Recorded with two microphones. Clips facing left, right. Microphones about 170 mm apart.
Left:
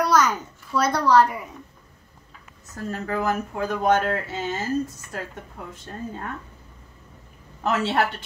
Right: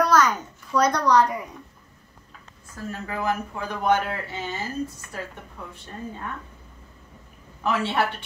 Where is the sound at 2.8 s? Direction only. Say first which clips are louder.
Left 2 dB; 45° left (ahead or behind).